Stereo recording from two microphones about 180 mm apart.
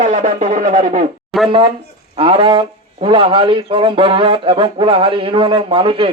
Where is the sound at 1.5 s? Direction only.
30° right (ahead or behind).